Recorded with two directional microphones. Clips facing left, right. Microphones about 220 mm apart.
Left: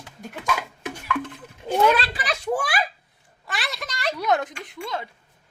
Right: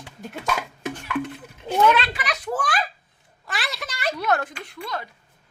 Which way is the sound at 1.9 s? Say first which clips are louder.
Even; 35° left (ahead or behind).